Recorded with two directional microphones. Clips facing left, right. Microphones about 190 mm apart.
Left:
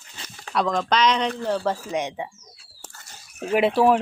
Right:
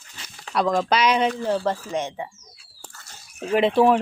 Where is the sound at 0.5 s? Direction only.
5° right (ahead or behind).